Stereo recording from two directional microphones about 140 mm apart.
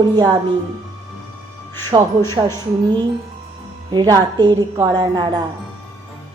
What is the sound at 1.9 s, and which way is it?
Music, 35° right (ahead or behind).